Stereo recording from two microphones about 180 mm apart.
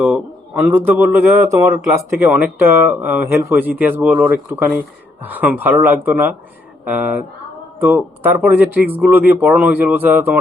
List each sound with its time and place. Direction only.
0.0 s speech: 10° right (ahead or behind)